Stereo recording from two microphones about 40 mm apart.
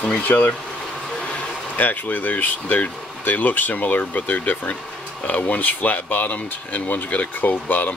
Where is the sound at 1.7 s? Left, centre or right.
Left.